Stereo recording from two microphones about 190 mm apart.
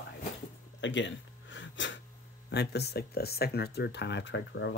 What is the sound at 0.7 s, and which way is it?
Gasp, 75° left (ahead or behind).